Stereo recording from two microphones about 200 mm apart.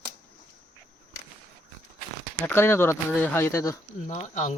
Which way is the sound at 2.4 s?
10° left (ahead or behind).